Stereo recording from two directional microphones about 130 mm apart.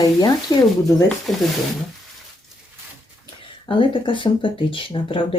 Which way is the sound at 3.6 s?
40° left (ahead or behind).